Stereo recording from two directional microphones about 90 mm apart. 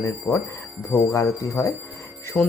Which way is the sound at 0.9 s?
30° left (ahead or behind).